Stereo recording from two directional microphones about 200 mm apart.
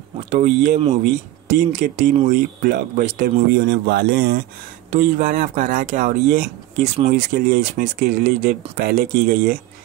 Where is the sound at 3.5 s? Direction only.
55° right (ahead or behind).